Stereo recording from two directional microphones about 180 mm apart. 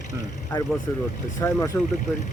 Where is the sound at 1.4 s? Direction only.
15° left (ahead or behind).